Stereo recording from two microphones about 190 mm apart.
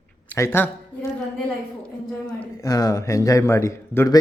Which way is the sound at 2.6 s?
20° left (ahead or behind).